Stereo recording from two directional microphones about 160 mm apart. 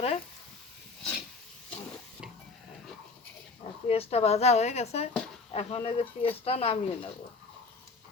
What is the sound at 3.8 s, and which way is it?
Speech, 40° left (ahead or behind).